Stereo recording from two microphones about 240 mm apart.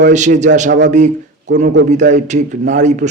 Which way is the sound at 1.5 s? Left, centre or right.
Right.